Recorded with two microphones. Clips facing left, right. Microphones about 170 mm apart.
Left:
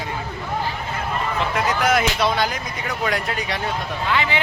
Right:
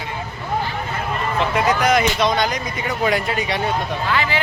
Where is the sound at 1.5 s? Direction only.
Centre (ahead or behind).